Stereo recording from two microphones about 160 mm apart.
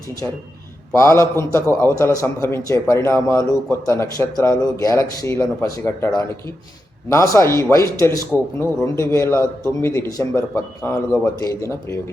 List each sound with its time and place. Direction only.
0.9 s a man's voice: 20° left (ahead or behind)